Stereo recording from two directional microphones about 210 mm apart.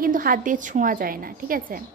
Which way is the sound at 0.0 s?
40° right (ahead or behind).